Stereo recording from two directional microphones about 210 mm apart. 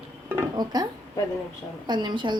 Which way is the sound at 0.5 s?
20° right (ahead or behind).